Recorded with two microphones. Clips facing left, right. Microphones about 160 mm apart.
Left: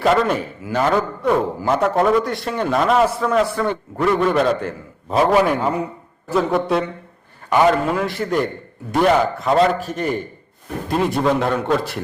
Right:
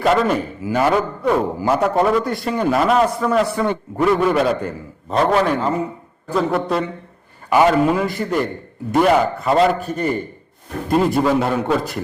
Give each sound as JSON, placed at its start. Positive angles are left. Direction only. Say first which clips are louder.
{"t": 0.0, "sound": "a man's voice", "louder": "even", "side_deg": 0}
{"t": 3.5, "sound": "a man's voice", "louder": "right 1 dB", "side_deg": -15}